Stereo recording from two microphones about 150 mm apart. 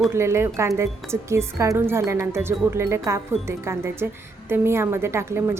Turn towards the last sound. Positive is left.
turn(degrees=-15)  # may be behind; listen again after turning